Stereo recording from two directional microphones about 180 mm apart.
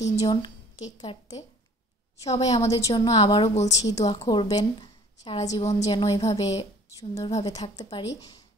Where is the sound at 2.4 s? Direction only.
20° left (ahead or behind).